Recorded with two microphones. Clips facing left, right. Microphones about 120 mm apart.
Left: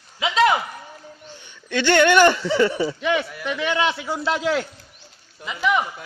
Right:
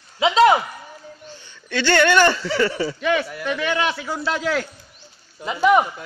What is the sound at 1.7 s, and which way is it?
A man's voice, 15° left (ahead or behind).